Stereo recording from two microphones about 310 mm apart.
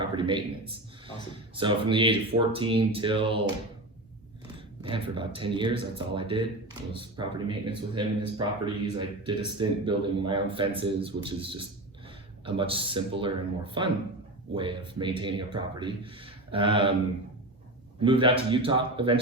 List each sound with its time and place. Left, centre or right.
0.0 s speech: centre
4.8 s speech: centre
18.0 s speech: centre